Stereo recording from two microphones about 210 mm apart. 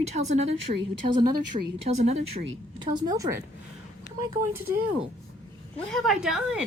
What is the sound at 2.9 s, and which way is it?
Speech, 15° right (ahead or behind).